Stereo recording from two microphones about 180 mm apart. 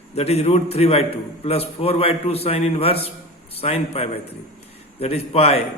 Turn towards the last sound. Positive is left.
turn(degrees=35)  # may be behind; listen again after turning